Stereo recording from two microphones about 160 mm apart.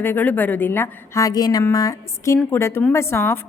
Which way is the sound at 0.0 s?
10° left (ahead or behind).